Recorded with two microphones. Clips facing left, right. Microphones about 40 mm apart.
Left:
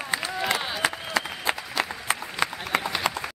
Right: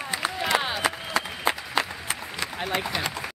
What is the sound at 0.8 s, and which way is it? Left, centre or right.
Applause, right.